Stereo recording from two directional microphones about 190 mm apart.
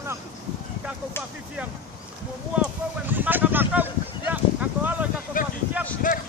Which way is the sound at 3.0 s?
10° right (ahead or behind).